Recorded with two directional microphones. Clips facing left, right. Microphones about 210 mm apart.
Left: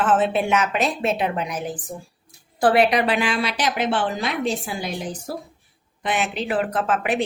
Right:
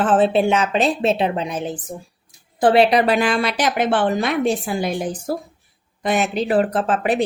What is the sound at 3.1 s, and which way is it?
A woman's voice, 45° right (ahead or behind).